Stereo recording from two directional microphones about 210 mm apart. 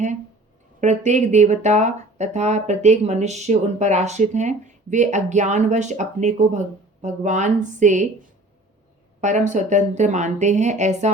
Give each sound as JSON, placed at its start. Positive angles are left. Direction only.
{"t": 0.8, "sound": "speech", "side_deg": -35}
{"t": 9.2, "sound": "speech", "side_deg": -35}